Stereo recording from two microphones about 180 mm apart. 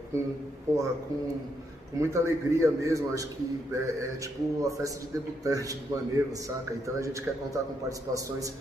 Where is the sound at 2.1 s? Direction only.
15° right (ahead or behind).